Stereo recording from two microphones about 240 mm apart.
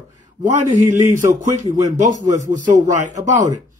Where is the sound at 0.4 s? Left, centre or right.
Right.